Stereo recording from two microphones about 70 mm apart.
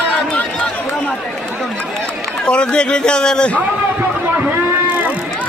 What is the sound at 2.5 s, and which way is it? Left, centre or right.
A man's voice, centre.